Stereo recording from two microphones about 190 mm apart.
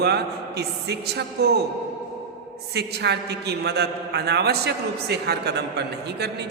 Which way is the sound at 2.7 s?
60° right (ahead or behind).